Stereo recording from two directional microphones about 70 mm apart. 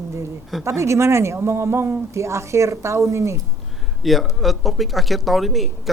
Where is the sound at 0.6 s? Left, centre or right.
Right.